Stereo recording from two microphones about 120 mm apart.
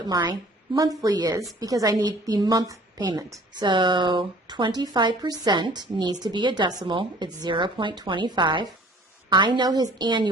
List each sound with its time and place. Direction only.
0.1 s a woman's voice: 35° right (ahead or behind)